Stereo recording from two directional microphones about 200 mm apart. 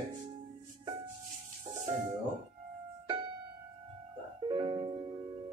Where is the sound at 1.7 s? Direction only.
20° right (ahead or behind).